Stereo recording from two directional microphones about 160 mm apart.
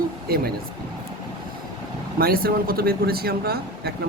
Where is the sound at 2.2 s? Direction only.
70° right (ahead or behind).